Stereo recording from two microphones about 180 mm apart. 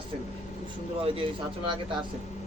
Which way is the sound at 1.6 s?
25° right (ahead or behind).